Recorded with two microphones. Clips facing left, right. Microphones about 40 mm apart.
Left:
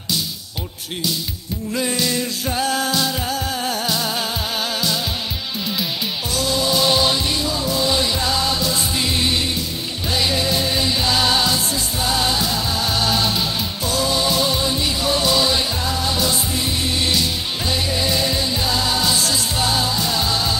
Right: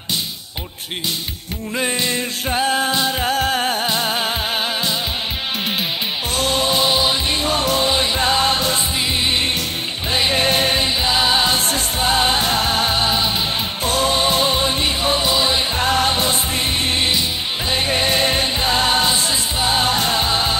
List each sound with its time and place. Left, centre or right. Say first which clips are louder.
1.8 s music: right 1 dB; right
6.3 s music: right 1 dB; right
6.8 s music: even; centre
7.4 s music: right 4 dB; right
7.8 s music: right 2 dB; right
10.1 s music: right 2 dB; right
10.4 s music: right 3 dB; right
10.9 s music: right 1 dB; right
11.5 s music: right 2 dB; right
12.9 s music: right 1 dB; right
13.8 s music: right 2 dB; right
15.8 s music: right 4 dB; right
19.8 s music: right 3 dB; right